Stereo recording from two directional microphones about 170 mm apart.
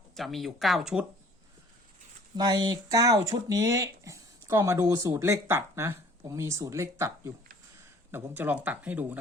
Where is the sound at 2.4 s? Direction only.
25° right (ahead or behind).